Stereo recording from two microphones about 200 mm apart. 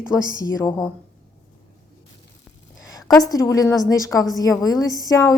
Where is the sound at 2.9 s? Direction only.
20° left (ahead or behind).